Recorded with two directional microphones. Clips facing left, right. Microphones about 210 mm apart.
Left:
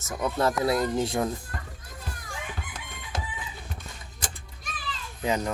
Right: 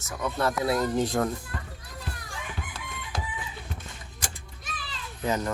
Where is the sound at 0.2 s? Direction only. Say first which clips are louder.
Left 2 dB; 25° left (ahead or behind).